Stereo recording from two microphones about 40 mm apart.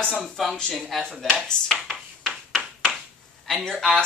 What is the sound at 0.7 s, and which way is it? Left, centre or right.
Speech, centre.